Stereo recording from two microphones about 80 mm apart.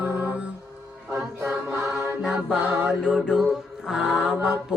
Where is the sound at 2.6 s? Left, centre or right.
Right.